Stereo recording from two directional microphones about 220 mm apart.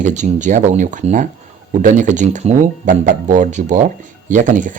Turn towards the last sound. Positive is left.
turn(degrees=-35)  # may be behind; listen again after turning